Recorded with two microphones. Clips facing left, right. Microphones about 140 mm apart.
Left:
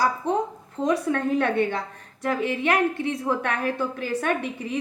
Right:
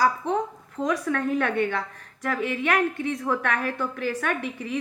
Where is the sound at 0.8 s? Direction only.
30° left (ahead or behind).